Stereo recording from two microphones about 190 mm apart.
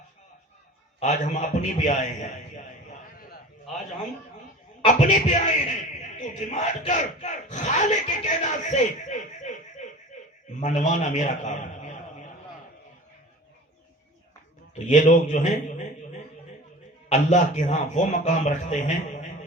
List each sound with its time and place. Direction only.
0.9 s speech: 40° left (ahead or behind)
3.2 s a sound: 50° left (ahead or behind)
4.9 s a man's voice: 40° left (ahead or behind)
14.8 s speech: 40° left (ahead or behind)
17.1 s speech: 35° left (ahead or behind)